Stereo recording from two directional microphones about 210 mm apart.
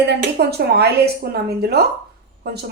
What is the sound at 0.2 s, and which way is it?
A woman's voice, 50° right (ahead or behind).